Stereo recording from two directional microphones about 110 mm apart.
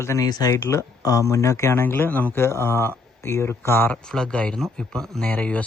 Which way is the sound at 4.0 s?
5° left (ahead or behind).